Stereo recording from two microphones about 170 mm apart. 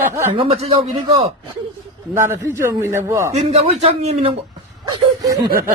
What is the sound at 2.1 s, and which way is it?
A man's voice, 15° right (ahead or behind).